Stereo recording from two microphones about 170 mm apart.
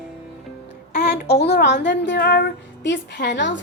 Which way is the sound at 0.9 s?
80° left.